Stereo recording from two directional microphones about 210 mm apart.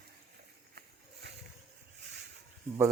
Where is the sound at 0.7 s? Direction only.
50° right (ahead or behind).